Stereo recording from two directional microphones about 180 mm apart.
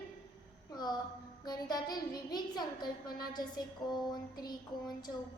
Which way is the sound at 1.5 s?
20° left (ahead or behind).